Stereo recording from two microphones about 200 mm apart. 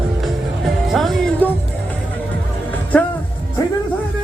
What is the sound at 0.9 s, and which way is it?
Music, centre (ahead or behind).